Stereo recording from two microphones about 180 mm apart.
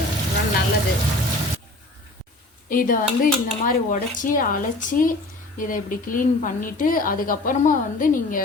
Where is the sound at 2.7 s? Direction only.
50° left (ahead or behind).